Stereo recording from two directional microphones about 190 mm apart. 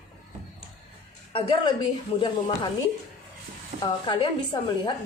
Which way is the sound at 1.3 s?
30° left (ahead or behind).